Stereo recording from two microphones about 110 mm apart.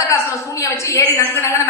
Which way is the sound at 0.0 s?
30° left (ahead or behind).